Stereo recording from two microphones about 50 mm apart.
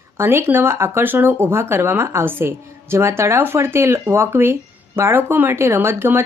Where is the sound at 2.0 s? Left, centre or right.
Right.